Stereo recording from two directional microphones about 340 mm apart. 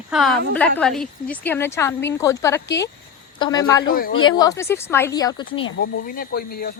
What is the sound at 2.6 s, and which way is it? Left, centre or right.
Speech, left.